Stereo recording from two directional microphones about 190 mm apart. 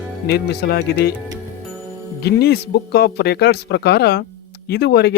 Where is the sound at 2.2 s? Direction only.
60° left (ahead or behind).